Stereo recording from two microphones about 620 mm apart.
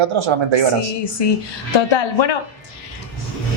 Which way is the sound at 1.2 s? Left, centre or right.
Left.